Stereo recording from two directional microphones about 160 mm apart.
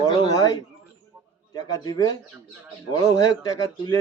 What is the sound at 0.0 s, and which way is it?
A man's voice, 25° left (ahead or behind).